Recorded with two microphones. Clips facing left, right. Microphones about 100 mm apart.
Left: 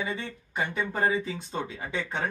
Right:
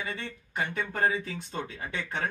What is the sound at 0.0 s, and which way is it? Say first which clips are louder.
Speech: left 3 dB; 20° left (ahead or behind).